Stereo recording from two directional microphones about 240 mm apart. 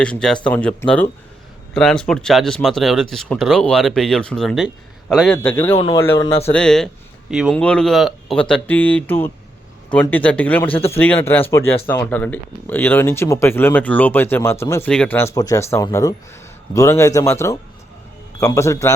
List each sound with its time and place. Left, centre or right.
0.0 s speech: centre
5.7 s speech: centre